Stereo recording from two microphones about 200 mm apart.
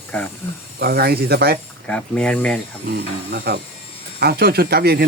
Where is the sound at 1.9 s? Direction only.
5° left (ahead or behind).